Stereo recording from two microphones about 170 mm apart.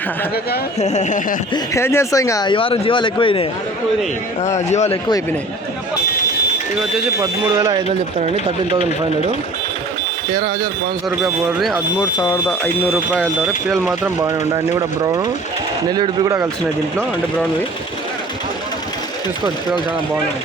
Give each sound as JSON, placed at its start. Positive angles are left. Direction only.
{"t": 0.8, "sound": "speech", "side_deg": 40}
{"t": 1.5, "sound": "speech", "side_deg": 15}
{"t": 4.4, "sound": "speech", "side_deg": 40}
{"t": 7.2, "sound": "speech", "side_deg": -20}
{"t": 7.9, "sound": "speech", "side_deg": -40}
{"t": 11.2, "sound": "speech", "side_deg": 0}
{"t": 11.9, "sound": "speech", "side_deg": 20}